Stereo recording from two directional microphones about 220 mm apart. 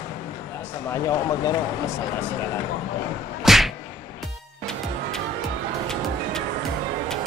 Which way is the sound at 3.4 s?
Centre (ahead or behind).